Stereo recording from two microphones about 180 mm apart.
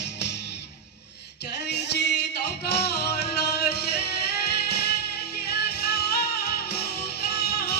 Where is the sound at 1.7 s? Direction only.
70° left (ahead or behind).